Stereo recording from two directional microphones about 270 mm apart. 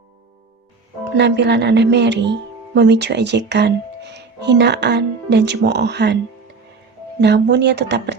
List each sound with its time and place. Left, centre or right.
1.1 s speech: right
7.2 s speech: right